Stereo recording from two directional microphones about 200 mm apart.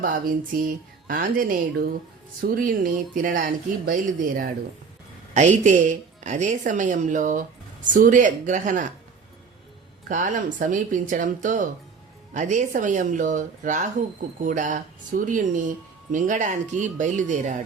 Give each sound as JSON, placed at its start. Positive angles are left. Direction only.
{"t": 0.0, "sound": "a woman's voice", "side_deg": -45}
{"t": 10.1, "sound": "a woman's voice", "side_deg": -40}